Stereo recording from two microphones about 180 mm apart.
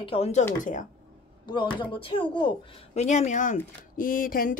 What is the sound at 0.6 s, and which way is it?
Speech, 45° left (ahead or behind).